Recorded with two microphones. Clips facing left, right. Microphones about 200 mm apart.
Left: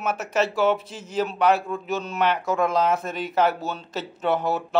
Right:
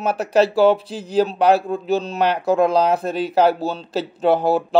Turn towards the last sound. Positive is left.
turn(degrees=-30)  # may be behind; listen again after turning